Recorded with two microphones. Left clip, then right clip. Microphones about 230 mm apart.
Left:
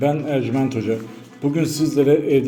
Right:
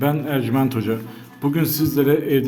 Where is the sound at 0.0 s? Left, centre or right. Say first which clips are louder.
Left 2 dB; right.